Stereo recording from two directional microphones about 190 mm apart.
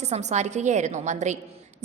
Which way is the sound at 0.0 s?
35° right (ahead or behind).